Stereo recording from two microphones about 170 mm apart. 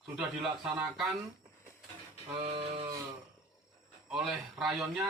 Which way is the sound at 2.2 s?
30° right (ahead or behind).